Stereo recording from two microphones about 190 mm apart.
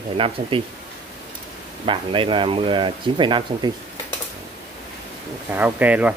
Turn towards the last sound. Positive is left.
turn(degrees=-5)  # may be behind; listen again after turning